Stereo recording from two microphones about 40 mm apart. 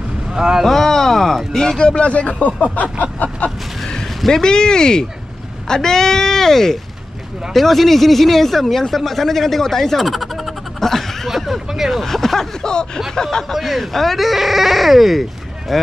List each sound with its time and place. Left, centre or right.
0.3 s speech: centre
0.7 s speech: centre
1.8 s speech: left
3.8 s a sound: centre
4.3 s speech: centre
10.8 s chuckle: centre
11.2 s a sound: centre
12.0 s a sound: centre
12.6 s speech: centre